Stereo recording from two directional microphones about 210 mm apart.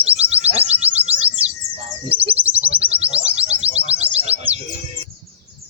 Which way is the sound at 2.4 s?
5° right (ahead or behind).